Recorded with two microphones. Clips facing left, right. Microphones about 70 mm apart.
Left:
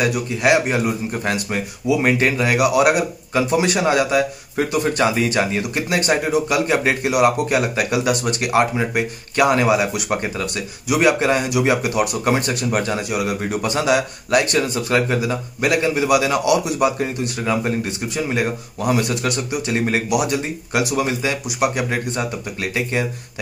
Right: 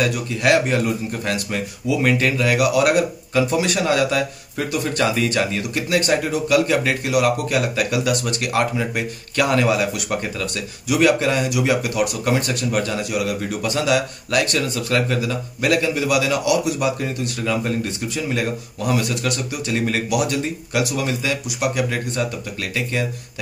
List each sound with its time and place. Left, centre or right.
0.0 s speech: centre